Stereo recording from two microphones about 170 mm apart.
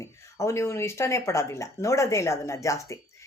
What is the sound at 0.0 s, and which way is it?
Speech, 15° left (ahead or behind).